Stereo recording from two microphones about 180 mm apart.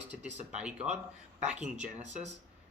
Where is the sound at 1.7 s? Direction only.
40° right (ahead or behind).